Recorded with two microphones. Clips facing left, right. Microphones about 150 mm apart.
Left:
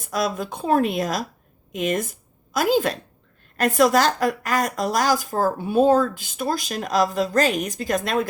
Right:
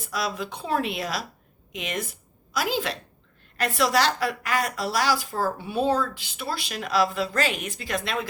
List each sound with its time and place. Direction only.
0.0 s a woman's voice: 50° left (ahead or behind)